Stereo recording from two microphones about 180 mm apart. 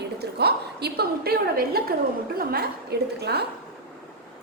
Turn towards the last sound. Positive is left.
turn(degrees=-65)  # may be behind; listen again after turning